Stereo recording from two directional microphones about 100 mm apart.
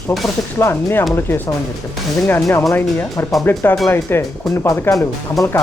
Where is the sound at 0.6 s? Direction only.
25° left (ahead or behind).